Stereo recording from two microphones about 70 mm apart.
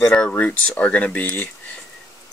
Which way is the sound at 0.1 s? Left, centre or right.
Centre.